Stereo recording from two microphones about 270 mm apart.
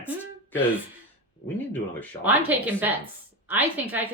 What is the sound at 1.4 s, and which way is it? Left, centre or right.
Speech, centre.